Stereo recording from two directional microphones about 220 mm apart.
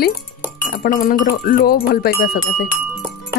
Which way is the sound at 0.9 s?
40° left (ahead or behind).